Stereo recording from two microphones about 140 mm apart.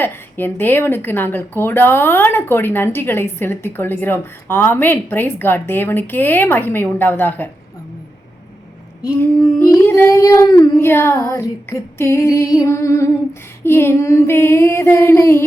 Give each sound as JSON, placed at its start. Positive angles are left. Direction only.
{"t": 0.0, "sound": "a woman's voice", "side_deg": 15}
{"t": 9.0, "sound": "child singing", "side_deg": 20}
{"t": 13.7, "sound": "a woman's voice", "side_deg": 15}